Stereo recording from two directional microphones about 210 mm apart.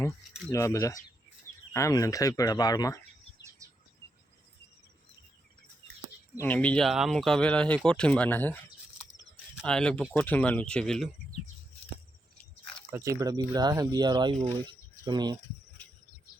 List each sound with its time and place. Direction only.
0.5 s speech: 15° left (ahead or behind)
6.3 s speech: 10° left (ahead or behind)
12.9 s speech: 15° right (ahead or behind)